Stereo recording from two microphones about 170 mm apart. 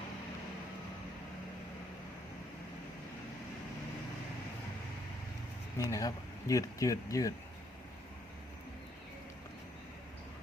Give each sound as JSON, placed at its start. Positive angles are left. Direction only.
{"t": 5.7, "sound": "speech", "side_deg": 20}